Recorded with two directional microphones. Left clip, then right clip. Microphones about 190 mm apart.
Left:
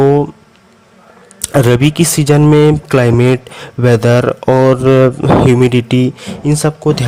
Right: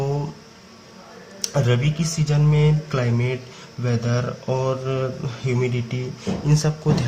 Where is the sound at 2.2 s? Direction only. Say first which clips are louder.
Left 15 dB; 55° left (ahead or behind).